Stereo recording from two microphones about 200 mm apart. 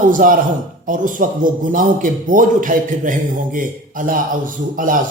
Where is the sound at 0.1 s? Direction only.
40° right (ahead or behind).